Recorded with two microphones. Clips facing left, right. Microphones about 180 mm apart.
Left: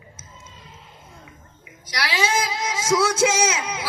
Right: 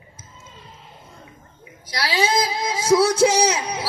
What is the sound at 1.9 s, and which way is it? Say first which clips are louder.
Speech: right 2 dB; 35° right (ahead or behind).